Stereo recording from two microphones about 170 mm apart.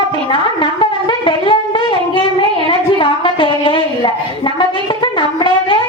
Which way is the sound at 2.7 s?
30° left (ahead or behind).